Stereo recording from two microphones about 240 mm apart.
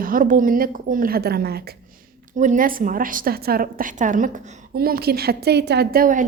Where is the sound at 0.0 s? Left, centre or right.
Right.